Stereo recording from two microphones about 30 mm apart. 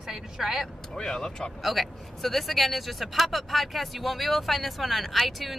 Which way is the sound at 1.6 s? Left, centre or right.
Centre.